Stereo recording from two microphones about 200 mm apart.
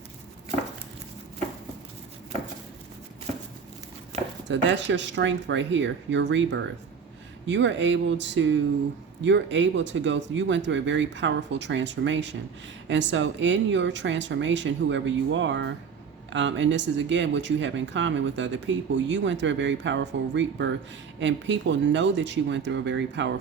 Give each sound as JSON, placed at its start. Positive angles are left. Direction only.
{"t": 4.4, "sound": "speech", "side_deg": -65}